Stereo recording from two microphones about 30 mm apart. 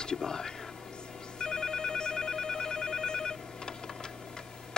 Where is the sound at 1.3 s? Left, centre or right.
Left.